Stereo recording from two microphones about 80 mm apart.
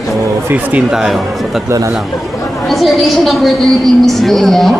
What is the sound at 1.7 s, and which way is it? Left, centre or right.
Speech, right.